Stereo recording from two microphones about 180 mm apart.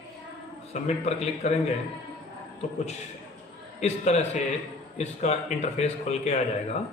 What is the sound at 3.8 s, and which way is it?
A man's voice, 40° left (ahead or behind).